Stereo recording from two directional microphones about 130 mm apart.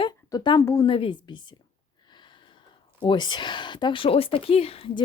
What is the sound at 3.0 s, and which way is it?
Speech, 35° left (ahead or behind).